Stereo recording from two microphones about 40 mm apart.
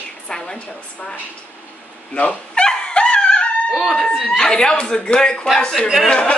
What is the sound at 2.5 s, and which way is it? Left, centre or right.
Dog, left.